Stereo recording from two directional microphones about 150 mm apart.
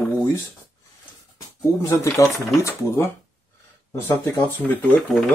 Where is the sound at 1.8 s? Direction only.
20° left (ahead or behind).